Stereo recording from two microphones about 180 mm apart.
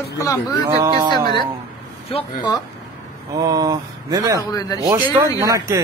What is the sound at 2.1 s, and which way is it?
Speech, 30° left (ahead or behind).